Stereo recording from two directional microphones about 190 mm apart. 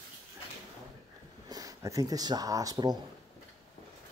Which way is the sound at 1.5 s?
15° right (ahead or behind).